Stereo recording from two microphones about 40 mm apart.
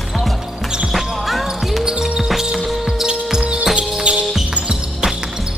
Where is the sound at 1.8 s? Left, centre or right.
Centre.